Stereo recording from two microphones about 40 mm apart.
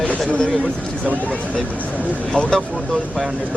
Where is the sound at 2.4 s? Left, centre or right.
Left.